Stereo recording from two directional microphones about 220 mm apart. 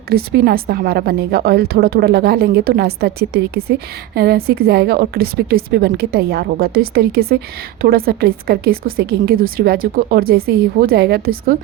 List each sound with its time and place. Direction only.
0.1 s a woman's voice: 45° right (ahead or behind)